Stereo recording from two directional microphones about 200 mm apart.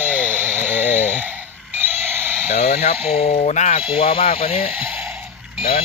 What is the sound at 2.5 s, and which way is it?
Dental drill, 30° left (ahead or behind).